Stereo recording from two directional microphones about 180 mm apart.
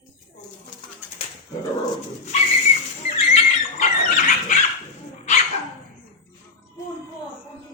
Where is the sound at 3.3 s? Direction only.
40° left (ahead or behind).